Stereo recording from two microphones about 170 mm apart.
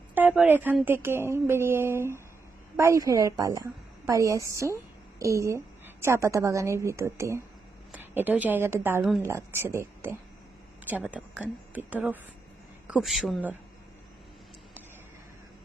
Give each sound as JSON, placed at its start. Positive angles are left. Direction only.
{"t": 0.1, "sound": "a woman's voice", "side_deg": -10}